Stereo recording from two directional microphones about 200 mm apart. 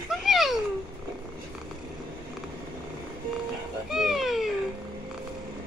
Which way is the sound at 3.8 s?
Centre (ahead or behind).